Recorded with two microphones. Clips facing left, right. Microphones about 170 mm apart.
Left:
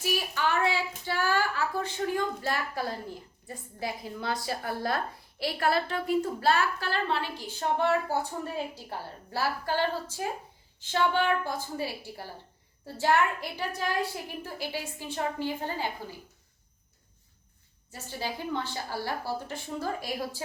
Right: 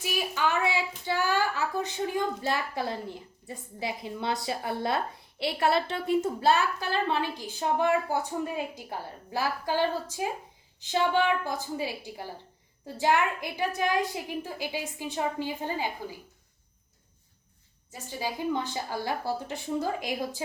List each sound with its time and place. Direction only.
0.0 s a woman's voice: 15° right (ahead or behind)
17.9 s a woman's voice: 15° right (ahead or behind)